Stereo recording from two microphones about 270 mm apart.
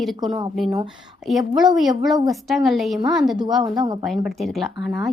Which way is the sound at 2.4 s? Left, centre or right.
Centre.